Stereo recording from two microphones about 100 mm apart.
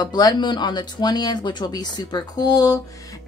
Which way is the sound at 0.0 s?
45° left (ahead or behind).